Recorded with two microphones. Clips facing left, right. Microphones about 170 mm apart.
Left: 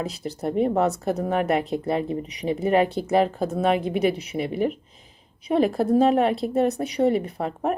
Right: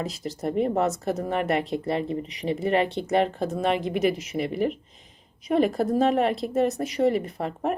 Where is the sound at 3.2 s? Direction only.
Centre (ahead or behind).